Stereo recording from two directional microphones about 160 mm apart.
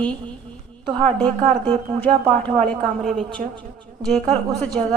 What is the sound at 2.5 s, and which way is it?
Speech, 50° right (ahead or behind).